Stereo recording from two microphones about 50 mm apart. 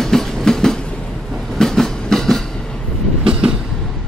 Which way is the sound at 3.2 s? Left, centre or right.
Centre.